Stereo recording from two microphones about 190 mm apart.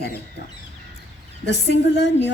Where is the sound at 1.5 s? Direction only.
70° left (ahead or behind).